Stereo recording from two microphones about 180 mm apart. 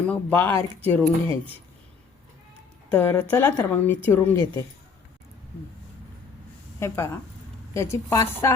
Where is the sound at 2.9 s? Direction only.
10° left (ahead or behind).